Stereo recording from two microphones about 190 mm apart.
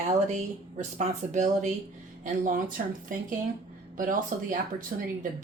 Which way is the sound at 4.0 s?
45° right (ahead or behind).